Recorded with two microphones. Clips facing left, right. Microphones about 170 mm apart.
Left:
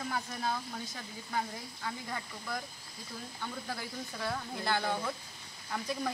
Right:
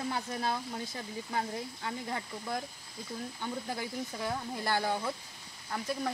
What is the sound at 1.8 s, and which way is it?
Speech, 25° right (ahead or behind).